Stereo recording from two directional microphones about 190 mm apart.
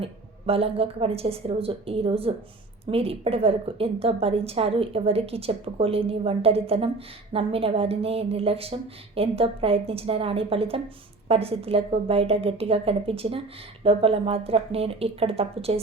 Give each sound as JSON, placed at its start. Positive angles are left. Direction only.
{"t": 0.0, "sound": "a woman's voice", "side_deg": -30}